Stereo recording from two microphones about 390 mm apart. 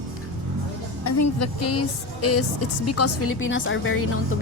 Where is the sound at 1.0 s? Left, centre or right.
Left.